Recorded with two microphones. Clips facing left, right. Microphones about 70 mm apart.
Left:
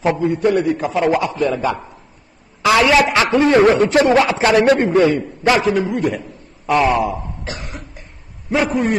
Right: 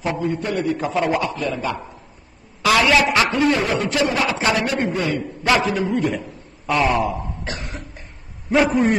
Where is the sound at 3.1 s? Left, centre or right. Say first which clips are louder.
Left 3 dB; left.